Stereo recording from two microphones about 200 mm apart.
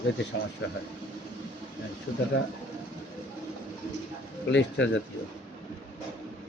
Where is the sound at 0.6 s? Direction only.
65° left (ahead or behind).